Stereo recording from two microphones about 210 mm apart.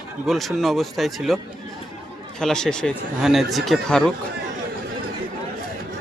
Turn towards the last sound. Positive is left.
turn(degrees=0)  # may be behind; listen again after turning